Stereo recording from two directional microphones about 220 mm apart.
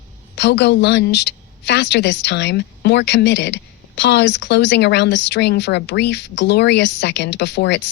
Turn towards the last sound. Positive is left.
turn(degrees=50)  # may be behind; listen again after turning